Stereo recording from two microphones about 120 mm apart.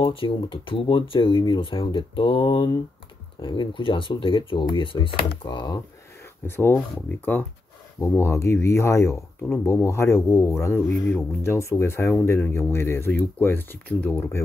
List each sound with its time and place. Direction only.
0.0 s speech: 45° left (ahead or behind)
6.4 s speech: 20° left (ahead or behind)